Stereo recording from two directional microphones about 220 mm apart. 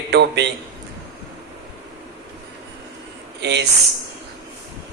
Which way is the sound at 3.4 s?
50° right (ahead or behind).